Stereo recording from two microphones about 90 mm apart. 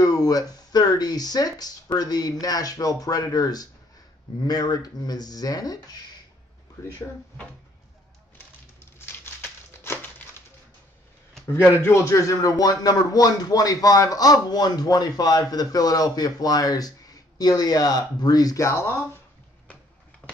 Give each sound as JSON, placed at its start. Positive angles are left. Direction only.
{"t": 0.0, "sound": "a man's voice", "side_deg": 45}
{"t": 8.9, "sound": "crumpling", "side_deg": 25}
{"t": 11.8, "sound": "a man's voice", "side_deg": 35}